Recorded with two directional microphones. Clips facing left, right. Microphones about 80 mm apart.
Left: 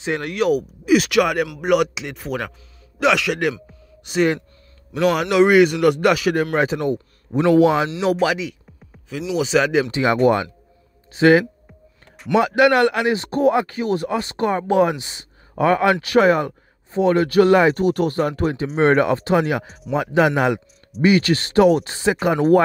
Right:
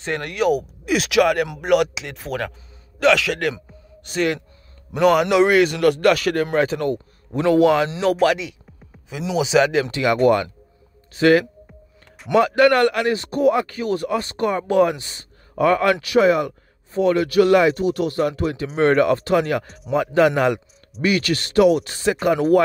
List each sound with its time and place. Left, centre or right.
0.0 s a man's voice: centre
3.6 s a sound: centre
4.9 s a man's voice: centre
8.0 s a man's voice: centre
9.8 s a man's voice: left
16.0 s speech: left
17.7 s speech: left
18.8 s a man's voice: left
19.4 s speech: centre
19.9 s a man's voice: centre
21.0 s speech: left
21.9 s a man's voice: left